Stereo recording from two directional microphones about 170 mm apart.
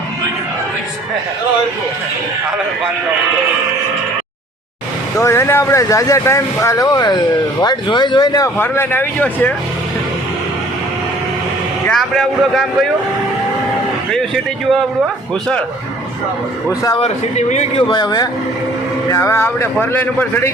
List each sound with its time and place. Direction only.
5.2 s speech: 15° left (ahead or behind)
11.9 s a man's voice: 5° left (ahead or behind)
14.1 s a man's voice: centre (ahead or behind)
16.6 s speech: 20° left (ahead or behind)
17.0 s speech: 40° left (ahead or behind); by 18.3 s 25° left (ahead or behind)
19.1 s speech: 15° left (ahead or behind)